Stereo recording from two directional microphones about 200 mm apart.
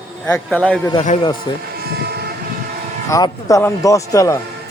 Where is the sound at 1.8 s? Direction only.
50° right (ahead or behind).